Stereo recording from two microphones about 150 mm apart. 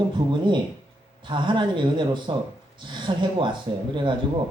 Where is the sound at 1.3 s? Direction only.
30° right (ahead or behind).